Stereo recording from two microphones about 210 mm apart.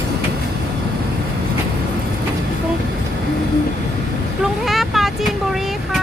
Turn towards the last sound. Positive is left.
turn(degrees=0)  # may be behind; listen again after turning